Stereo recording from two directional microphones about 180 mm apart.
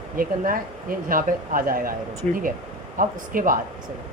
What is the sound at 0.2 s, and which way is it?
Speech, 50° right (ahead or behind).